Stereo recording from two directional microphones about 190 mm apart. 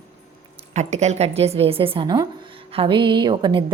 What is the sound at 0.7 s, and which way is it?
A woman's voice, 35° right (ahead or behind).